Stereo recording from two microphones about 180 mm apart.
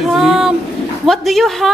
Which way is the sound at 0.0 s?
Centre (ahead or behind).